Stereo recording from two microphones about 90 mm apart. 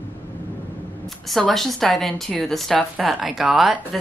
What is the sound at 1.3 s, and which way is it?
A woman's voice, centre (ahead or behind).